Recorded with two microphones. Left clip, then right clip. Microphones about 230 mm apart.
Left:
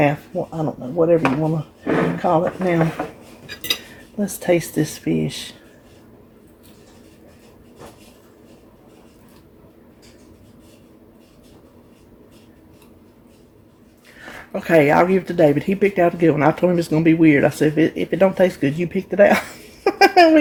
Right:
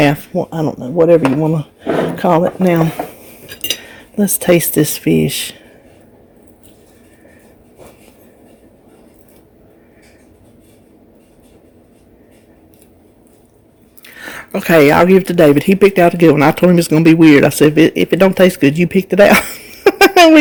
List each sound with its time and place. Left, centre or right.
0.0 s speech: right
3.0 s dishes: centre
4.2 s speech: right
14.2 s speech: right